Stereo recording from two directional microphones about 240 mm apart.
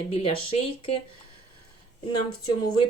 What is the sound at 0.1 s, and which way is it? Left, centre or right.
Speech, left.